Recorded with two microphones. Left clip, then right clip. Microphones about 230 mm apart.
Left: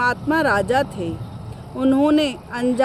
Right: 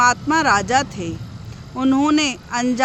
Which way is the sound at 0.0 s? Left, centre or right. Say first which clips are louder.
Right 3 dB; right.